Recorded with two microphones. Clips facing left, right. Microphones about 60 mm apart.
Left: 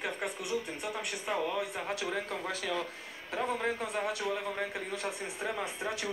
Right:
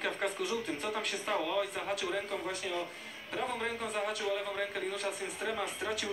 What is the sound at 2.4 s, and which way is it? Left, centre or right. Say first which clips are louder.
Speech: left 2 dB; left.